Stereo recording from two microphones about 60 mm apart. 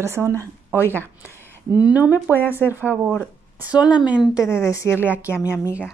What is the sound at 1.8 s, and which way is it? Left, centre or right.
Speech, right.